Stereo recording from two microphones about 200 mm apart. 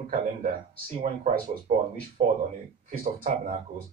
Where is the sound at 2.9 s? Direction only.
45° right (ahead or behind).